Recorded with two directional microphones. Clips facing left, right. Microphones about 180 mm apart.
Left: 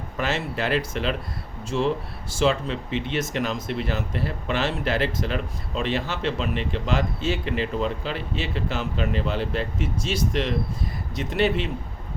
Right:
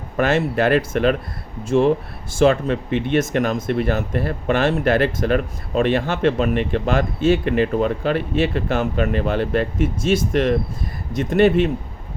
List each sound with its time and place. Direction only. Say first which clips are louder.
0.2 s speech: right 9 dB; 55° right (ahead or behind)